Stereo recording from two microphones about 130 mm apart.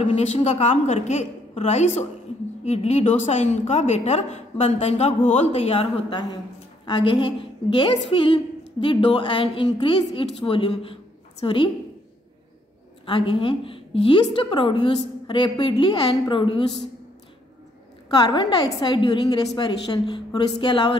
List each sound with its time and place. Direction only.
0.0 s a woman's voice: 55° left (ahead or behind)
6.9 s a woman's voice: 40° left (ahead or behind)
13.0 s a woman's voice: 45° left (ahead or behind)
18.1 s a woman's voice: 35° left (ahead or behind)